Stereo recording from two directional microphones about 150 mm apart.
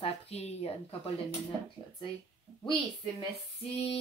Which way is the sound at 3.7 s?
40° left (ahead or behind).